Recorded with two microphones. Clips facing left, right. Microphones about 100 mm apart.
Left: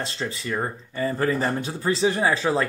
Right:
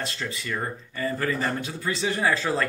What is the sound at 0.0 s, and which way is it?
A man's voice, 30° left (ahead or behind).